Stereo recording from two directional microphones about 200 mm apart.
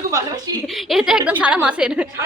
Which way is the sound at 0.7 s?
Centre (ahead or behind).